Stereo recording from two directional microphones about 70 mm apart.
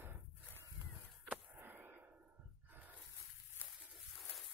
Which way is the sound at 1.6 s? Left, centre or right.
Right.